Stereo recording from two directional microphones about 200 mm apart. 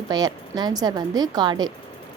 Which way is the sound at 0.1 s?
20° right (ahead or behind).